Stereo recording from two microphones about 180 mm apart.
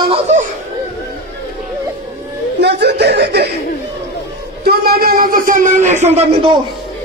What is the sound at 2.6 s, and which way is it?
Speech, 70° right (ahead or behind).